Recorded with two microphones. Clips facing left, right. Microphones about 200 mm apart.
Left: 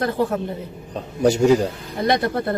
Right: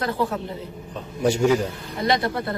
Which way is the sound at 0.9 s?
35° left (ahead or behind).